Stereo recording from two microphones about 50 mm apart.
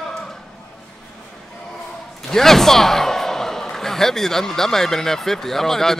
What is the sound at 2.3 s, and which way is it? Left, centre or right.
Speech, centre.